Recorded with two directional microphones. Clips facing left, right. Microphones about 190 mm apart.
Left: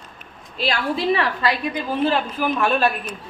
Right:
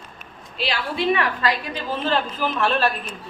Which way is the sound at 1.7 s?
10° left (ahead or behind).